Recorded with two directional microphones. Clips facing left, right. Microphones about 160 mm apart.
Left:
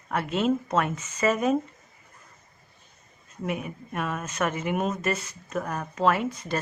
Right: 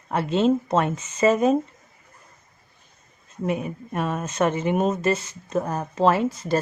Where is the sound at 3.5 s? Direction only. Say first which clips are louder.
Right 5 dB; 30° right (ahead or behind).